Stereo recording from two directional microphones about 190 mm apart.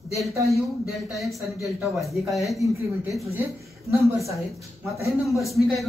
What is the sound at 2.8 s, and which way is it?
A woman's voice, 15° right (ahead or behind).